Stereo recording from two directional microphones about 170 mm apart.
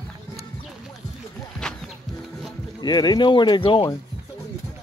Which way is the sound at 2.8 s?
25° left (ahead or behind).